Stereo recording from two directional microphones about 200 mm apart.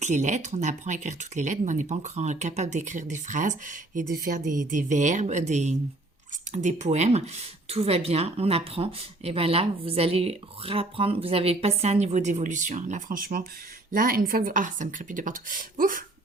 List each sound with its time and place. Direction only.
0.0 s speech: 35° right (ahead or behind)